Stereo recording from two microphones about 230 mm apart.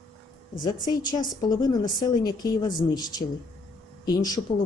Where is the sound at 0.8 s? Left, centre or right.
Centre.